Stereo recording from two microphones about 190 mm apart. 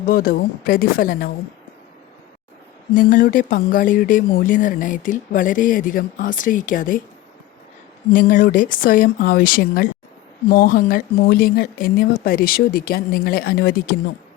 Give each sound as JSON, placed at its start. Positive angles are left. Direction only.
{"t": 0.1, "sound": "speech", "side_deg": 50}
{"t": 2.9, "sound": "speech", "side_deg": 45}
{"t": 8.1, "sound": "speech", "side_deg": 45}